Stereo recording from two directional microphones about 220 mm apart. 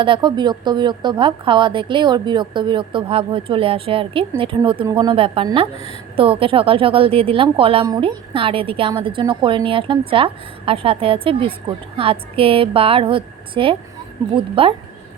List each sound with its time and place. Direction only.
0.0 s a woman's voice: 20° right (ahead or behind)